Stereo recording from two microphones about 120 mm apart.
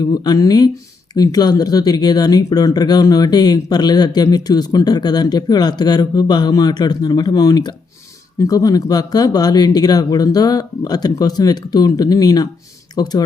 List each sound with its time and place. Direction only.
0.0 s speech: 35° left (ahead or behind)